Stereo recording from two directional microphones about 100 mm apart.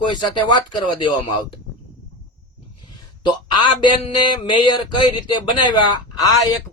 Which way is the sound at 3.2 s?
50° left (ahead or behind).